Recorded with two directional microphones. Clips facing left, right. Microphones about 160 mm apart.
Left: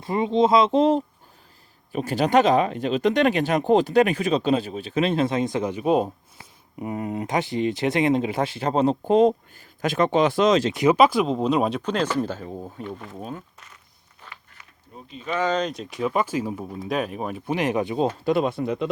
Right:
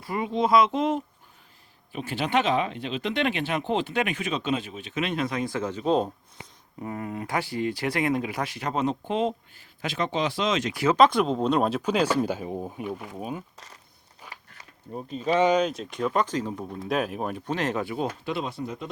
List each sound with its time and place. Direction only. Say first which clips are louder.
0.0 s speech: left 6 dB; 25° left (ahead or behind); by 6.5 s 5° left (ahead or behind)
6.7 s speech: left 5 dB; 20° left (ahead or behind); by 10.6 s 45° left (ahead or behind)
10.6 s speech: left 5 dB; 20° left (ahead or behind)
10.9 s speech: left 1 dB; 5° left (ahead or behind); by 13.4 s 10° right (ahead or behind)
14.3 s a sound: even; 40° right (ahead or behind)
15.4 s speech: right 2 dB; 10° right (ahead or behind); by 18.1 s 25° left (ahead or behind)
18.3 s speech: left 8 dB; 50° left (ahead or behind); by 18.9 s 70° left (ahead or behind)